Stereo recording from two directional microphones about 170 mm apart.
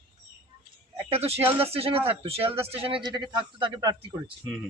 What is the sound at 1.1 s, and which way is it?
A man's voice, 35° right (ahead or behind).